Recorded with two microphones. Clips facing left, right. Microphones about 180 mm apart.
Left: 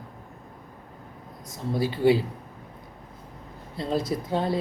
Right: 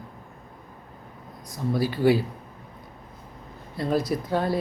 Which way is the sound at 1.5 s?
25° left (ahead or behind).